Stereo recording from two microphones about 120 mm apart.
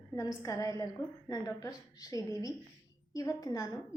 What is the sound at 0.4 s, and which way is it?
A woman's voice, 30° left (ahead or behind).